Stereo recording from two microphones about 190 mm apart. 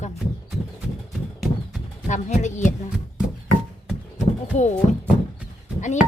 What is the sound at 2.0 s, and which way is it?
Speech, 40° left (ahead or behind).